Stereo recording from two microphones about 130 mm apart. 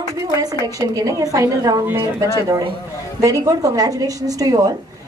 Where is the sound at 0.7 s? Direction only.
25° right (ahead or behind).